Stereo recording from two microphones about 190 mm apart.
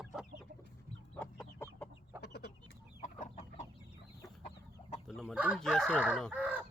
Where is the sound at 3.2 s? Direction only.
35° left (ahead or behind).